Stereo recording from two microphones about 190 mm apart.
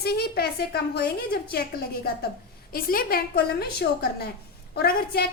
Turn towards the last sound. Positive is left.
turn(degrees=55)  # may be behind; listen again after turning